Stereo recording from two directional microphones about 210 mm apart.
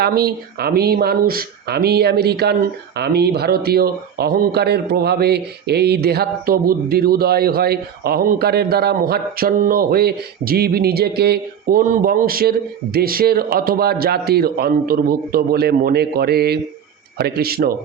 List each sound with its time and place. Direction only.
0.0 s speech: 50° right (ahead or behind)